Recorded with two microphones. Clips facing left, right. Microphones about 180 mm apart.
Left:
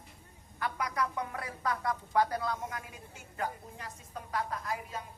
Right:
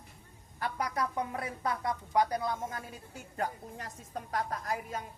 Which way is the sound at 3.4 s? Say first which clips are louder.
Right 1 dB; 45° right (ahead or behind).